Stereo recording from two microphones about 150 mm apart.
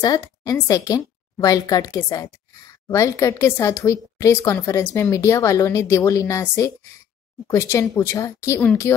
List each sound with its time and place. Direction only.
0.0 s a woman's voice: 25° left (ahead or behind)